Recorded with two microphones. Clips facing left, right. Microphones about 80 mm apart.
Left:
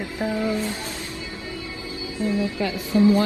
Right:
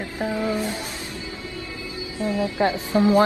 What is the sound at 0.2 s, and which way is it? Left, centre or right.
Music, right.